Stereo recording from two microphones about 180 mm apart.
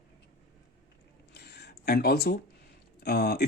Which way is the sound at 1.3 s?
65° left (ahead or behind).